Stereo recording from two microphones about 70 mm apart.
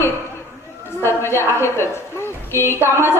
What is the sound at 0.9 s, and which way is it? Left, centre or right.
A woman's voice, left.